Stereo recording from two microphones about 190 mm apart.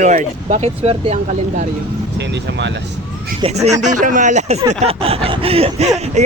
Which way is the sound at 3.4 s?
35° right (ahead or behind).